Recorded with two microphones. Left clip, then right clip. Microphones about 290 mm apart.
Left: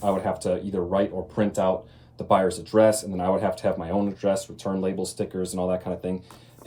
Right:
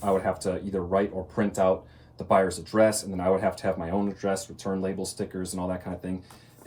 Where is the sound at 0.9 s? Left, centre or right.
Centre.